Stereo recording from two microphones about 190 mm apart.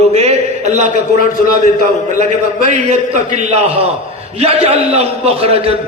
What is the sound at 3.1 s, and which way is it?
A man's voice, 40° right (ahead or behind).